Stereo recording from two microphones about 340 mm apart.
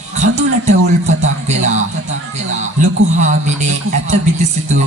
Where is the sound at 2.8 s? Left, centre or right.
Right.